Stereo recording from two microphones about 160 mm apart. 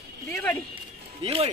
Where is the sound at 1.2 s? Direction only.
35° right (ahead or behind).